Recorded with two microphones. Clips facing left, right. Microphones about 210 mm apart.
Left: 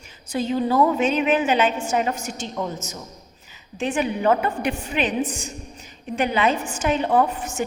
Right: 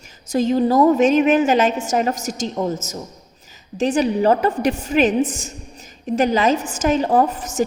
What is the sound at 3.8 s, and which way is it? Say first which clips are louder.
A woman's voice: right 5 dB; 35° right (ahead or behind).